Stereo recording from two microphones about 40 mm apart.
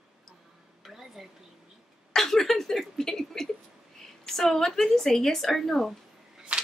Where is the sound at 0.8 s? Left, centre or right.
Centre.